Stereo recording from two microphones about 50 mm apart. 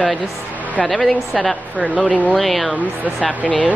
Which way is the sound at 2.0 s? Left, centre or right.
Left.